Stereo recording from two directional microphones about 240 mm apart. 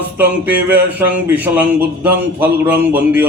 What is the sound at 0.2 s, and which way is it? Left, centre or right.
Speech, centre.